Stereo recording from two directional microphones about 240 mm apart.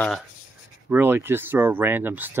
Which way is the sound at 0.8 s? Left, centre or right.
Centre.